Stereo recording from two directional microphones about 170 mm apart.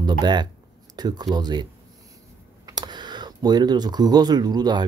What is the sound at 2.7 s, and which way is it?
Speech, 25° right (ahead or behind).